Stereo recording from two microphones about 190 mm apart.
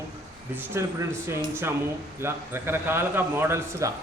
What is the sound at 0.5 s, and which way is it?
A man's voice, 15° right (ahead or behind).